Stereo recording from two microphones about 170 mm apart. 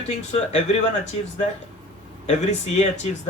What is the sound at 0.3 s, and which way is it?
Speech, 45° left (ahead or behind).